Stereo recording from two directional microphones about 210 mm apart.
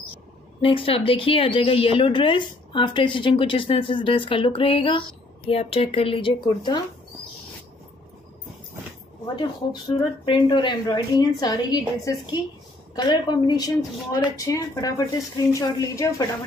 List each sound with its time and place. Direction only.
0.6 s a woman's voice: 25° left (ahead or behind)
9.2 s a woman's voice: 20° left (ahead or behind)